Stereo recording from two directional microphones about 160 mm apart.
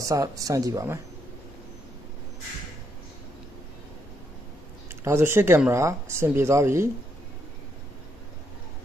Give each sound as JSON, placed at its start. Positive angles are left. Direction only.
{"t": 0.0, "sound": "speech", "side_deg": -20}
{"t": 4.9, "sound": "speech", "side_deg": -15}